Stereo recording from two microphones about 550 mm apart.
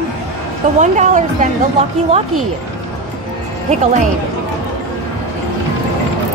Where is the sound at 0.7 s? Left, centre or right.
Centre.